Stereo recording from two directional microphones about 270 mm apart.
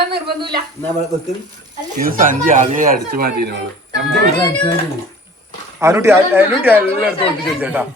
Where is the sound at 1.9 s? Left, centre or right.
Right.